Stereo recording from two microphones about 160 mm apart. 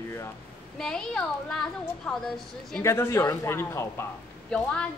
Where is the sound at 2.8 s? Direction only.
15° left (ahead or behind).